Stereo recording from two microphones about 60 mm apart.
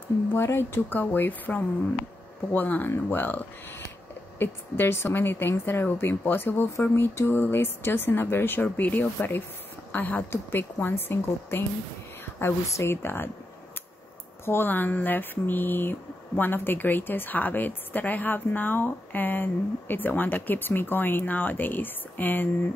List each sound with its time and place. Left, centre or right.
0.3 s speech: left
8.6 s speech: left
14.4 s speech: left